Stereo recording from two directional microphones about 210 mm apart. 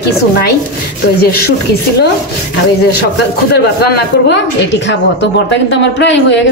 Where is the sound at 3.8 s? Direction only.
50° left (ahead or behind).